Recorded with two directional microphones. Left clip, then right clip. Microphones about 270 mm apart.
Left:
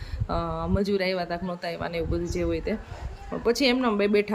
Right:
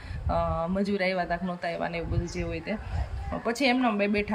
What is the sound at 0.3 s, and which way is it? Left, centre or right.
Speech, centre.